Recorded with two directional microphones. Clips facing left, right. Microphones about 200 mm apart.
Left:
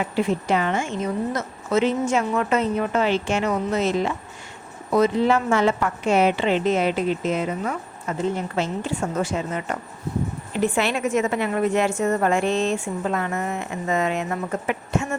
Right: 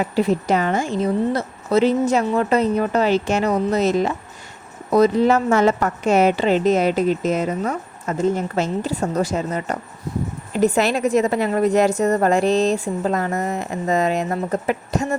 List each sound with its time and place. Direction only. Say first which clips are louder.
0.0 s a woman's voice: right 4 dB; 40° right (ahead or behind)